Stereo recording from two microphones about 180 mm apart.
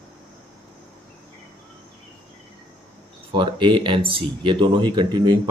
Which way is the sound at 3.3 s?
25° right (ahead or behind).